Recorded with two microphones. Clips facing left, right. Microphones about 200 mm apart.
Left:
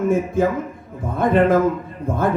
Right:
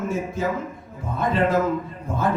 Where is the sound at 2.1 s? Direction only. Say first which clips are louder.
Left 5 dB; 55° left (ahead or behind).